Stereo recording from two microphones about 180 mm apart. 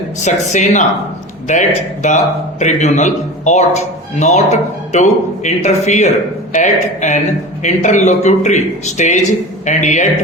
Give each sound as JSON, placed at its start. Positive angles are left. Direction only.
{"t": 0.2, "sound": "speech", "side_deg": 40}